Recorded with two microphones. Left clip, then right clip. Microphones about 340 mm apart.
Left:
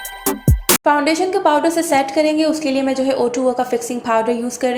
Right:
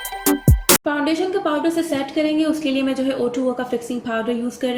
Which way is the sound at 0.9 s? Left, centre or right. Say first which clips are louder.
Left 6 dB; centre.